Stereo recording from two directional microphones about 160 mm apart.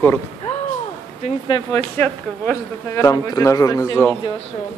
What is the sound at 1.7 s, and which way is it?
Speech, 10° left (ahead or behind).